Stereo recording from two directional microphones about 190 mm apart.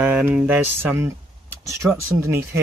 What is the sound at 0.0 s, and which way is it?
Speech, 5° right (ahead or behind).